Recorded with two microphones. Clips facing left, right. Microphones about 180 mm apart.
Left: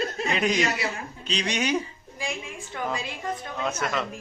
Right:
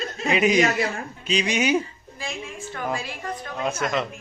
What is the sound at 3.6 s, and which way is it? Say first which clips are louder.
Speech: right 3 dB; 10° right (ahead or behind).